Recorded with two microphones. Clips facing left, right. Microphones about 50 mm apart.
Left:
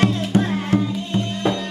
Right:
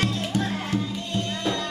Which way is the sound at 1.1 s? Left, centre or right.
Left.